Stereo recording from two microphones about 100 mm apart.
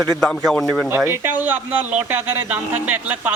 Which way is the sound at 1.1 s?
20° right (ahead or behind).